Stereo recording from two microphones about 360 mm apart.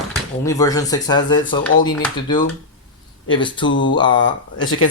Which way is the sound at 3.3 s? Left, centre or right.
Centre.